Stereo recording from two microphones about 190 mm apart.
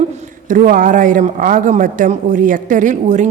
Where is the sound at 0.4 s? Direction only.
45° right (ahead or behind).